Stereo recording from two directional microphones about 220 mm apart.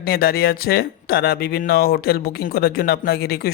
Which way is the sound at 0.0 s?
45° left (ahead or behind).